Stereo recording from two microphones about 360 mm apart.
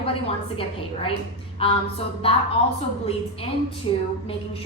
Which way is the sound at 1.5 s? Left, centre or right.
Centre.